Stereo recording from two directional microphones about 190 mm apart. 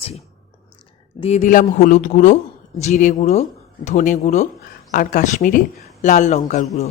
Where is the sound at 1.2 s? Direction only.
35° left (ahead or behind).